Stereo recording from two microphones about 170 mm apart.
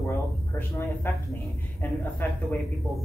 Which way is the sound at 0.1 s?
15° left (ahead or behind).